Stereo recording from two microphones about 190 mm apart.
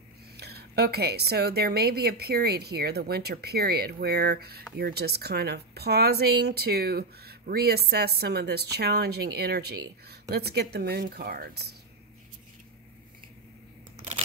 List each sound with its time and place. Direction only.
0.4 s speech: 60° right (ahead or behind)